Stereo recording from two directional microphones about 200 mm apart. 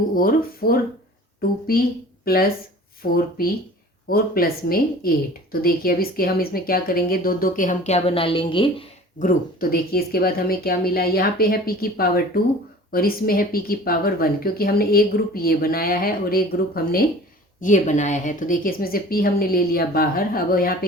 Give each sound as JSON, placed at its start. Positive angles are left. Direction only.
{"t": 0.1, "sound": "a woman's voice", "side_deg": 45}
{"t": 9.1, "sound": "speech", "side_deg": 45}